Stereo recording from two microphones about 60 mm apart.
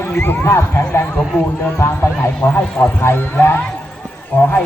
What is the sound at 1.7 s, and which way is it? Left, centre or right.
Speech, left.